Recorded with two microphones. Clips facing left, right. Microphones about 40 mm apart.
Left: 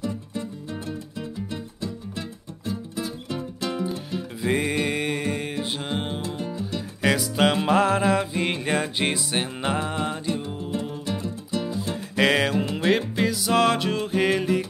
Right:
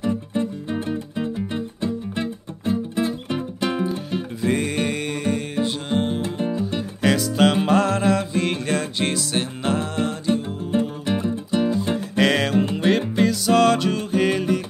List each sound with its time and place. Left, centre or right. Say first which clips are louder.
0.0 s music: right 7 dB; right
4.4 s music: right 1 dB; centre
6.2 s music: right 6 dB; right
7.0 s music: right 3 dB; centre
10.2 s music: right 5 dB; right
12.2 s music: right 1 dB; centre